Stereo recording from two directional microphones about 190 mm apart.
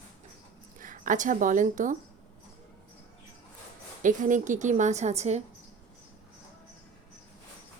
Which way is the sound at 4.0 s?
40° right (ahead or behind).